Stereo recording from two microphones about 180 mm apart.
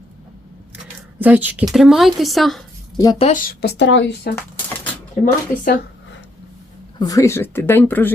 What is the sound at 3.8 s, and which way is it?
Speech, 80° left.